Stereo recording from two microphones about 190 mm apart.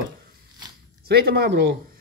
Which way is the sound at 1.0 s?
55° right (ahead or behind).